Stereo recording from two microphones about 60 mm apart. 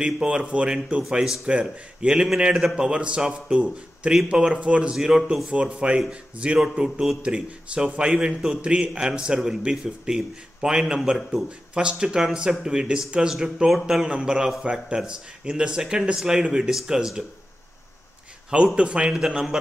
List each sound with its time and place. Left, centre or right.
0.0 s a man's voice: centre
1.1 s a man's voice: centre
11.7 s a man's voice: centre
14.0 s a man's voice: centre
18.8 s a man's voice: centre